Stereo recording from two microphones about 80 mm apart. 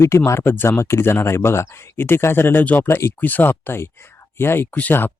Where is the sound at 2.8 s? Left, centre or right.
Left.